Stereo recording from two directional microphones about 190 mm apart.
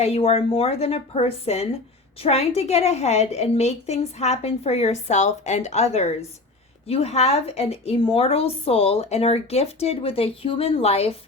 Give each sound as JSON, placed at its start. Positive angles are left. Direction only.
{"t": 0.0, "sound": "a woman's voice", "side_deg": 30}